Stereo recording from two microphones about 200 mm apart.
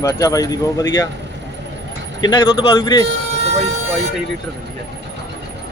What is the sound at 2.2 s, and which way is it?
Speech, 20° left (ahead or behind).